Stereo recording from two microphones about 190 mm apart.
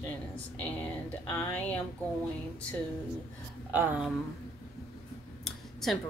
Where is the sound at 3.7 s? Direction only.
5° right (ahead or behind).